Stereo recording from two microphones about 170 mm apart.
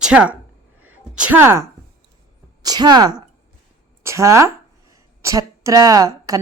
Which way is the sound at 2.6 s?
25° right (ahead or behind).